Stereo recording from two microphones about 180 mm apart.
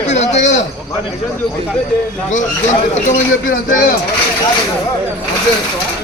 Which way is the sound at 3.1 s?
45° left (ahead or behind).